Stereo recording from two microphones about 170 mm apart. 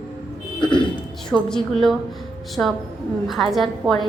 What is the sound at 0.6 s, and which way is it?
Speech, 25° left (ahead or behind).